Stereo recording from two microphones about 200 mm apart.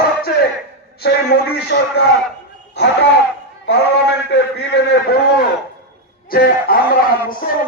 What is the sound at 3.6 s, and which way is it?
A man's voice, 60° left (ahead or behind).